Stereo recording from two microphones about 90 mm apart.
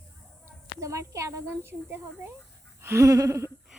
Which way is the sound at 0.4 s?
35° right (ahead or behind).